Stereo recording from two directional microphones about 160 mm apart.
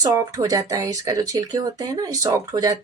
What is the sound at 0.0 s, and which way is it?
Speech, 20° right (ahead or behind).